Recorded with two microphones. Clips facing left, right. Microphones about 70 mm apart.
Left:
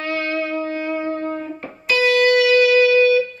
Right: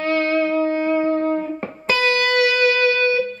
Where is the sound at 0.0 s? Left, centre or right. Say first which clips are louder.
Right 4 dB; right.